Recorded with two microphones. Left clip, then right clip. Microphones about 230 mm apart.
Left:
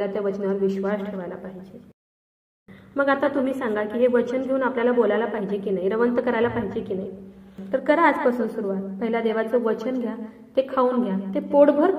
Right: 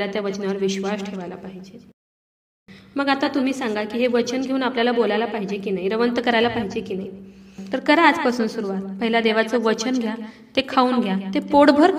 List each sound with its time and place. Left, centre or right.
0.0 s a woman's voice: right
2.9 s a woman's voice: right
5.9 s speech: right
7.7 s a woman's voice: right